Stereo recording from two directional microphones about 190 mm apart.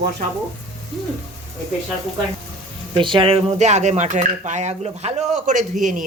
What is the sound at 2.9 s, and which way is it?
Speech, 25° right (ahead or behind).